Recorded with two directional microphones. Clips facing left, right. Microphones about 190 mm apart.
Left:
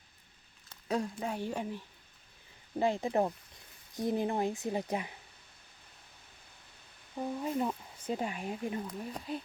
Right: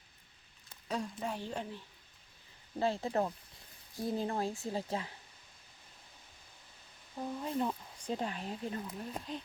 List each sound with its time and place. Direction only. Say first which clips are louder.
0.9 s speech: left 4 dB; 10° left (ahead or behind)
7.2 s speech: left 2 dB; 10° left (ahead or behind)